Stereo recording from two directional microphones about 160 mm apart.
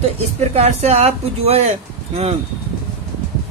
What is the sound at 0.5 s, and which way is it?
Speech, 40° right (ahead or behind).